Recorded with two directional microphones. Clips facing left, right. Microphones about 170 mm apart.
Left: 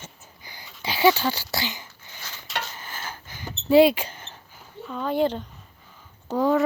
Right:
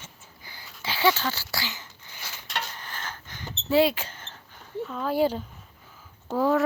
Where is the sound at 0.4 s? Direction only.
15° left (ahead or behind).